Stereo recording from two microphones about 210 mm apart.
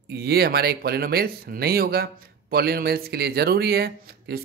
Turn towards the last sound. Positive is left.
turn(degrees=-50)  # may be behind; listen again after turning